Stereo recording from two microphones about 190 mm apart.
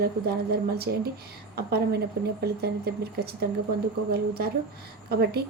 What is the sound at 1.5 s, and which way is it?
A woman's voice, 55° right (ahead or behind).